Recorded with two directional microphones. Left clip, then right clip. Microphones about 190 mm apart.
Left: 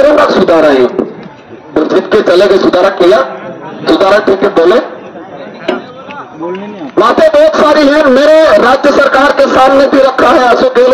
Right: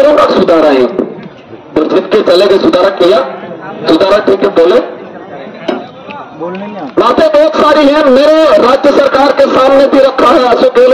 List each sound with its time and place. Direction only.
0.0 s a man's voice: 60° left (ahead or behind)
7.0 s a man's voice: 55° left (ahead or behind)